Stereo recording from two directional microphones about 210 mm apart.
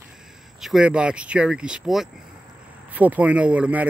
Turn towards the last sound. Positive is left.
turn(degrees=-5)  # may be behind; listen again after turning